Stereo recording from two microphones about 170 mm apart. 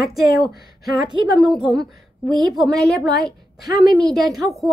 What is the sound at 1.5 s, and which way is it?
A woman's voice, centre (ahead or behind).